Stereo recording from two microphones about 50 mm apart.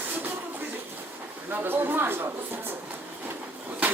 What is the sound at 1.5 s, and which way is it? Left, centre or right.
Speech, right.